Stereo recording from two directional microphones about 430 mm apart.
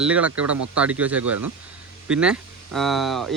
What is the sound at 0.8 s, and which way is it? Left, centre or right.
Speech, centre.